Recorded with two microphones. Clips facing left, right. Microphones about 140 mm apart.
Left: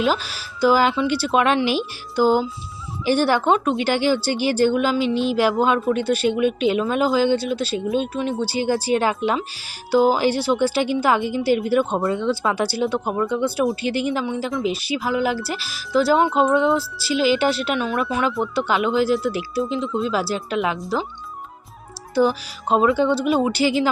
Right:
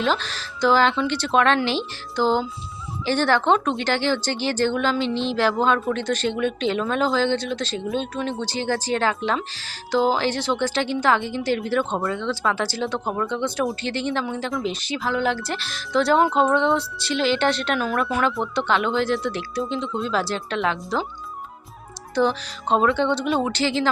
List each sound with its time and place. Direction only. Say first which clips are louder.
0.0 s speech: left 2 dB; 10° left (ahead or behind)
12.0 s speech: left 3 dB; 20° left (ahead or behind); by 21.1 s 5° left (ahead or behind)
22.1 s speech: left 2 dB; 5° left (ahead or behind)